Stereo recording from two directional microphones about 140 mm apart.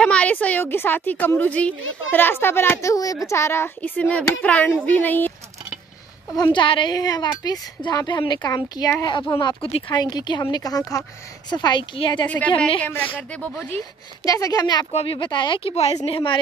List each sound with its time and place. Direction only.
0.0 s a child's voice: 10° left (ahead or behind)
6.3 s a woman's voice: 30° left (ahead or behind)
9.7 s speech: 45° left (ahead or behind)
9.9 s a woman's voice: 30° left (ahead or behind)
12.8 s a child's voice: 15° left (ahead or behind)
14.2 s a woman's voice: 25° left (ahead or behind)
14.9 s speech: 50° left (ahead or behind)
15.1 s speech: 35° left (ahead or behind); by 16.2 s 50° left (ahead or behind)